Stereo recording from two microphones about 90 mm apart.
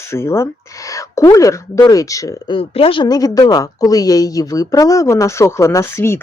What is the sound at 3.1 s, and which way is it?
Speech, 45° left (ahead or behind).